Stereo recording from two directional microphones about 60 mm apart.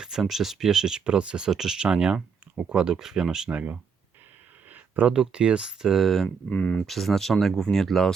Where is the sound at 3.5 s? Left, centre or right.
Right.